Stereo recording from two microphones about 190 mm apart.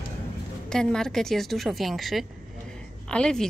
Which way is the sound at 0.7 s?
5° left (ahead or behind).